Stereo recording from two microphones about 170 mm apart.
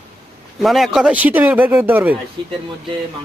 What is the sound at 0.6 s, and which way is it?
Speech, centre (ahead or behind).